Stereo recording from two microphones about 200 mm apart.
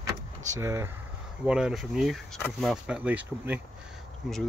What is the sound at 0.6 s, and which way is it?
Speech, 15° right (ahead or behind).